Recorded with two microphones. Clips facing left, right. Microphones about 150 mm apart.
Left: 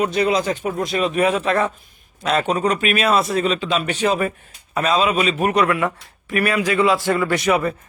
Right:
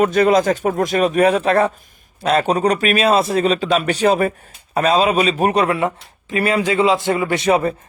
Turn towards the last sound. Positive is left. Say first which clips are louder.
# right 2 dB
turn(degrees=-30)  # may be behind; listen again after turning